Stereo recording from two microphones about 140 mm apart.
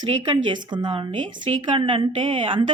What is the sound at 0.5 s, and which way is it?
A woman's voice, 30° right (ahead or behind).